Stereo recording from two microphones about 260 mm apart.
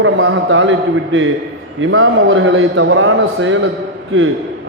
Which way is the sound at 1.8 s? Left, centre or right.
Right.